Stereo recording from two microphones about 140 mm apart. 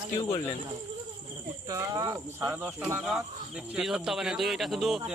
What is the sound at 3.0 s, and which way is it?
A man's voice, 5° right (ahead or behind).